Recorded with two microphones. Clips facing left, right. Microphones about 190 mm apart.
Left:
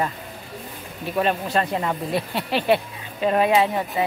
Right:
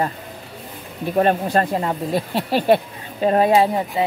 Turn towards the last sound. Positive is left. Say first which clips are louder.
# right 3 dB
turn(degrees=-30)  # may be behind; listen again after turning